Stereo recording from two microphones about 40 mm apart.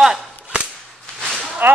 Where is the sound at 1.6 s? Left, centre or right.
Right.